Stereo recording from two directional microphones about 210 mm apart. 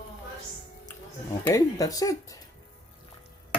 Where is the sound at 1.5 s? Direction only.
15° left (ahead or behind).